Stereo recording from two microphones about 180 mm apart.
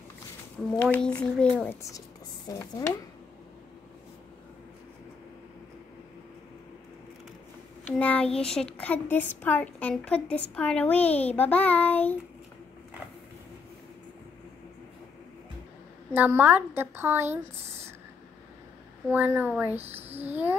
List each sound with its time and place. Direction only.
0.6 s a woman's voice: centre (ahead or behind)
1.8 s a woman's voice: 20° left (ahead or behind)
7.8 s a child's voice: 10° left (ahead or behind)
16.1 s a woman's voice: 10° right (ahead or behind)
17.6 s a sound: 35° right (ahead or behind)
19.1 s a woman's voice: 10° right (ahead or behind)